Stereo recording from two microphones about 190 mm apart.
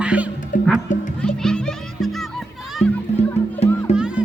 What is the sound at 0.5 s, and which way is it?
Music, 45° left (ahead or behind).